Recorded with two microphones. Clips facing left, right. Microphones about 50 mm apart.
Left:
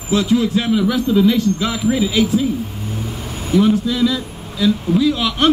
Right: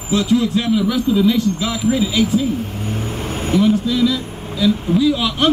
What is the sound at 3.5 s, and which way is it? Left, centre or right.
Speech, centre.